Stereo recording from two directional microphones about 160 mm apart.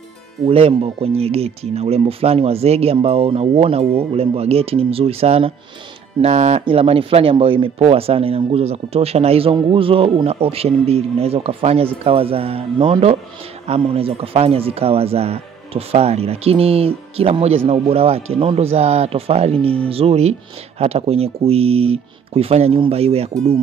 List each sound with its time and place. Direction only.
0.5 s speech: 35° right (ahead or behind)